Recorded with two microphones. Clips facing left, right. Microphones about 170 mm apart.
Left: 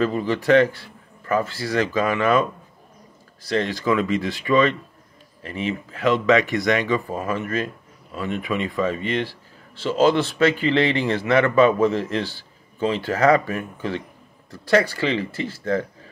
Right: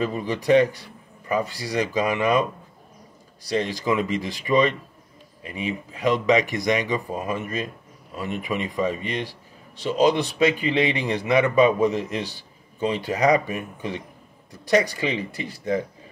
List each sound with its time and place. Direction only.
0.2 s a man's voice: 15° right (ahead or behind)
3.5 s a man's voice: 15° right (ahead or behind)